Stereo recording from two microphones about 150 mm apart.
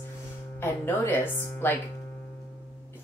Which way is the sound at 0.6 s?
15° left (ahead or behind).